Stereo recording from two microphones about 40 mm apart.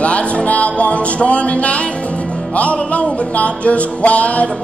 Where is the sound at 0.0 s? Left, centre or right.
Left.